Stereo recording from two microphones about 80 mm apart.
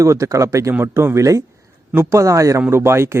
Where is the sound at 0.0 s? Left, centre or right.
Right.